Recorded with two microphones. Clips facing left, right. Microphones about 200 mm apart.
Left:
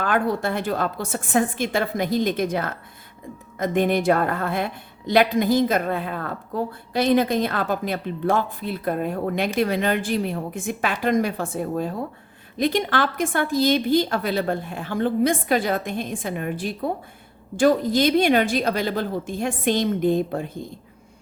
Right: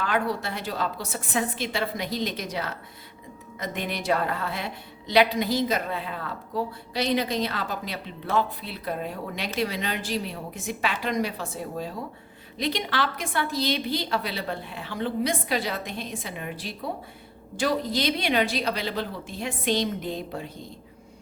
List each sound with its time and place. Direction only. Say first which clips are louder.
0.0 s a woman's voice: left 5 dB; 50° left (ahead or behind)